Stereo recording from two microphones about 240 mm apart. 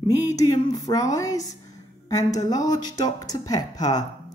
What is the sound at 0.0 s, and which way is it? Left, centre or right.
A woman's voice, centre.